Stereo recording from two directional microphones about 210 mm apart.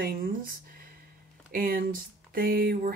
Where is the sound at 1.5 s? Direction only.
45° right (ahead or behind).